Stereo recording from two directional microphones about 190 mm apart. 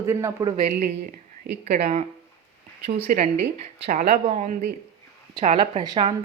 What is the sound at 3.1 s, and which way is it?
Speech, 45° right (ahead or behind).